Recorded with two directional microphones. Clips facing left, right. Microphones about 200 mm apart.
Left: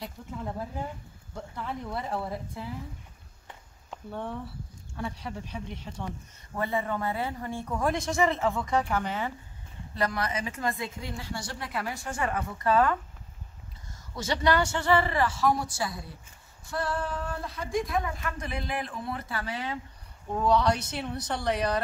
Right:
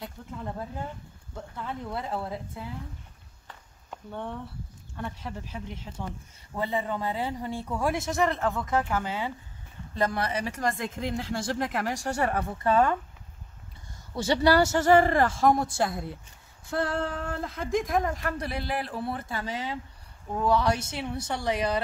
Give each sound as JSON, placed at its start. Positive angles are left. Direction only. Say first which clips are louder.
{"t": 0.0, "sound": "speech", "louder": "left 1 dB", "side_deg": 5}
{"t": 3.9, "sound": "speech", "louder": "left 1 dB", "side_deg": 5}
{"t": 6.5, "sound": "a man's voice", "louder": "even", "side_deg": -15}
{"t": 9.9, "sound": "speech", "louder": "right 2 dB", "side_deg": -25}
{"t": 11.0, "sound": "a woman's voice", "louder": "right 7 dB", "side_deg": -50}
{"t": 11.4, "sound": "a sound", "louder": "right 5 dB", "side_deg": -60}
{"t": 12.0, "sound": "speech", "louder": "right 3 dB", "side_deg": -35}
{"t": 14.1, "sound": "a woman's voice", "louder": "right 4 dB", "side_deg": -30}
{"t": 16.7, "sound": "a sound", "louder": "right 2 dB", "side_deg": -55}
{"t": 17.7, "sound": "speech", "louder": "right 3 dB", "side_deg": -45}
{"t": 20.3, "sound": "a man's voice", "louder": "even", "side_deg": -5}